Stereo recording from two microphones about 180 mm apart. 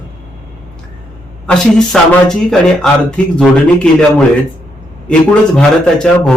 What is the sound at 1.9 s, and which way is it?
Speech, centre (ahead or behind).